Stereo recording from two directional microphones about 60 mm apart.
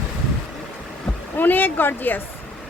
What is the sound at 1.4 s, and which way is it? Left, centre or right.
Speech, left.